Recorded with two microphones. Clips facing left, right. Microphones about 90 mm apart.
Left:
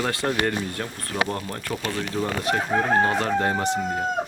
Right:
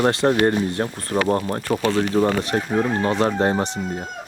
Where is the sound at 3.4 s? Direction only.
30° right (ahead or behind).